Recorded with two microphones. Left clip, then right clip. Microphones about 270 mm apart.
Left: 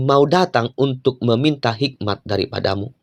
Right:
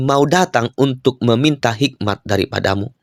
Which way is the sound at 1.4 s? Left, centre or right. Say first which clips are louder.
Right 3 dB; right.